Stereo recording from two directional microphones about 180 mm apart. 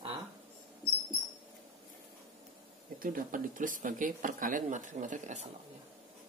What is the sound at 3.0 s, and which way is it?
Speech, 50° right (ahead or behind).